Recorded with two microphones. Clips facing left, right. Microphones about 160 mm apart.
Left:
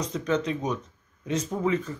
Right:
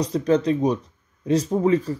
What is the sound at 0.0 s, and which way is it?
Speech, 35° right (ahead or behind).